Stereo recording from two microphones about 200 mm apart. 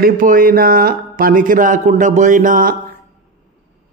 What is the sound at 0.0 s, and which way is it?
A man's voice, 45° right (ahead or behind).